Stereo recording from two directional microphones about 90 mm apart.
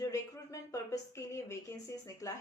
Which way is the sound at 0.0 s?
35° left (ahead or behind).